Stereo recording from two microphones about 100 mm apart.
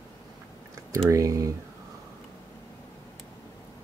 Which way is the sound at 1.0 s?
30° right (ahead or behind).